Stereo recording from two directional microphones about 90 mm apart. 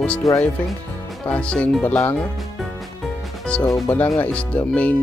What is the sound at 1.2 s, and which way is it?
Speech, 15° left (ahead or behind).